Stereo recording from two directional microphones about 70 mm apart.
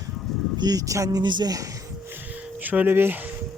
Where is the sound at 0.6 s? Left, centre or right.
Right.